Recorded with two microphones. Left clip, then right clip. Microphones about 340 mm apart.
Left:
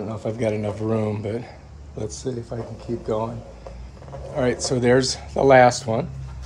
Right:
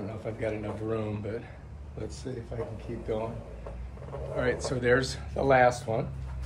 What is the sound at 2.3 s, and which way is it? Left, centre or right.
Speech, left.